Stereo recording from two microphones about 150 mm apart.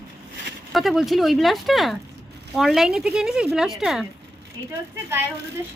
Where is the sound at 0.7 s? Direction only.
Centre (ahead or behind).